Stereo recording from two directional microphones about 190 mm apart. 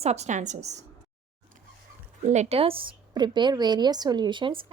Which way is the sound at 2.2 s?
40° right (ahead or behind).